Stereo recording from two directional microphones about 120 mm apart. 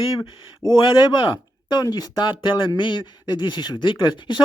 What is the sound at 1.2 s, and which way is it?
Speech, 40° left (ahead or behind).